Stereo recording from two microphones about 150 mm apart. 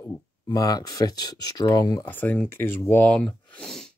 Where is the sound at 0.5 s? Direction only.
25° left (ahead or behind).